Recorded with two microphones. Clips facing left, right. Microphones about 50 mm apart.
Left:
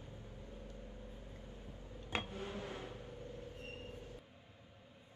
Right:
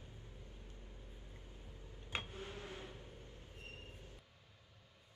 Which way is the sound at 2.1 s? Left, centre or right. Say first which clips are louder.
Left 4 dB; left.